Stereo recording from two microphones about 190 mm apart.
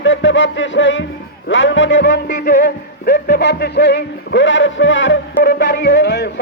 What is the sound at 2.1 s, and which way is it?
Music, 45° left (ahead or behind).